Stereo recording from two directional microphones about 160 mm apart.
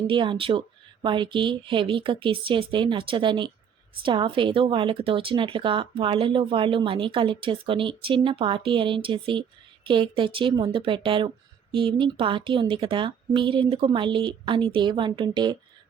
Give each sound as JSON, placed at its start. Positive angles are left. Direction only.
{"t": 0.1, "sound": "speech", "side_deg": -30}